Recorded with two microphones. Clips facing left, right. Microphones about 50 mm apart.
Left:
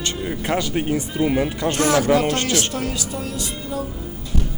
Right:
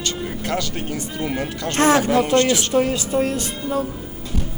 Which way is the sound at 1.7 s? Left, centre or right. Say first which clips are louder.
Right 2 dB; right.